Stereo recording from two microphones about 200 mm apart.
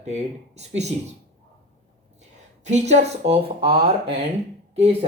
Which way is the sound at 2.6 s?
35° right (ahead or behind).